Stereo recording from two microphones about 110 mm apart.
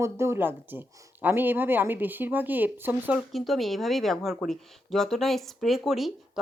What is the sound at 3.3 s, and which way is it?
Speech, centre (ahead or behind).